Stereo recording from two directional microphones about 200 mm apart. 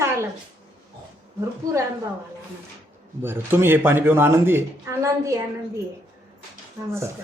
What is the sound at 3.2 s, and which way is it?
Speech, 10° right (ahead or behind).